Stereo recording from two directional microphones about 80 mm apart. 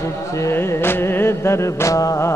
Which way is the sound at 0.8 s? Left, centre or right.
Left.